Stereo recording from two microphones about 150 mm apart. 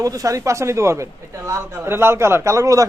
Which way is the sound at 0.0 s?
25° right (ahead or behind).